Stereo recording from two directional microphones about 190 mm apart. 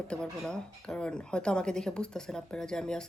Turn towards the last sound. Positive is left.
turn(degrees=5)  # may be behind; listen again after turning